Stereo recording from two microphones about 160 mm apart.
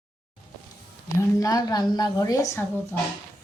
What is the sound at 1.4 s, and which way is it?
Speech, 20° left (ahead or behind).